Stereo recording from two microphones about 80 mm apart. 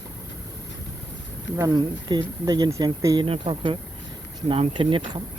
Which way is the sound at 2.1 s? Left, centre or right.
Right.